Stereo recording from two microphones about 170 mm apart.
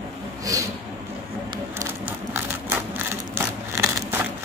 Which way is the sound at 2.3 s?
10° right (ahead or behind).